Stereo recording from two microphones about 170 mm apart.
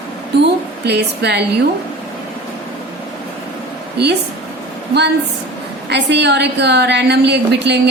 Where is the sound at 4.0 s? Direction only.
80° right.